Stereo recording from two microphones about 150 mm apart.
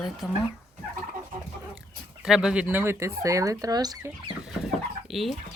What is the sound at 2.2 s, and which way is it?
Speech, 5° right (ahead or behind).